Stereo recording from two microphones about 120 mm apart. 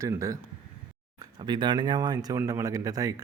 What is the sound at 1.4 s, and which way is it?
A man's voice, 40° right (ahead or behind).